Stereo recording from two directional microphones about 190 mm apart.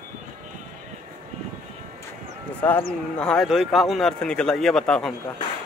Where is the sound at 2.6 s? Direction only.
5° left (ahead or behind).